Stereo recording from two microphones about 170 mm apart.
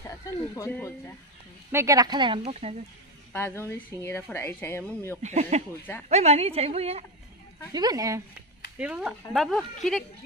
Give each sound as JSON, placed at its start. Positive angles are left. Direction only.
{"t": 0.7, "sound": "speech", "side_deg": 10}
{"t": 1.7, "sound": "speech", "side_deg": -15}
{"t": 3.3, "sound": "speech", "side_deg": 15}
{"t": 5.2, "sound": "a woman's voice", "side_deg": -40}
{"t": 7.7, "sound": "speech", "side_deg": -20}
{"t": 8.7, "sound": "speech", "side_deg": -5}